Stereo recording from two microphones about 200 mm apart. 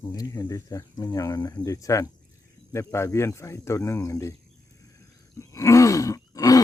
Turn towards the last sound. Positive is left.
turn(degrees=15)  # may be behind; listen again after turning